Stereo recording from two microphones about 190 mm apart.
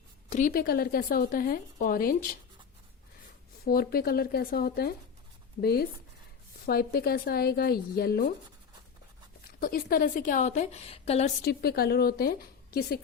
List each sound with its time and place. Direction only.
0.3 s a woman's voice: 40° left (ahead or behind)
3.6 s a woman's voice: 55° left (ahead or behind)
9.6 s a woman's voice: 50° left (ahead or behind); by 11.3 s 30° left (ahead or behind)
11.4 s a woman's voice: 55° left (ahead or behind)